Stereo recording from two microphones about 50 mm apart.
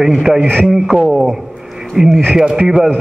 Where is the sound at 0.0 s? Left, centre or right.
Centre.